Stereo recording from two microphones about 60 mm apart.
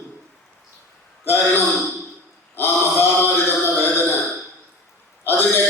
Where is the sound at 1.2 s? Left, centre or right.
Left.